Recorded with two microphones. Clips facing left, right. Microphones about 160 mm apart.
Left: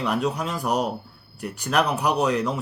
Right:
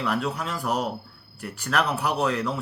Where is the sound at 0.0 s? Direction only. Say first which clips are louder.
Left 3 dB; 20° left (ahead or behind).